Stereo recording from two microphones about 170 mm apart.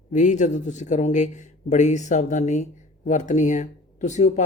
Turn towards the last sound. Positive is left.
turn(degrees=45)  # may be behind; listen again after turning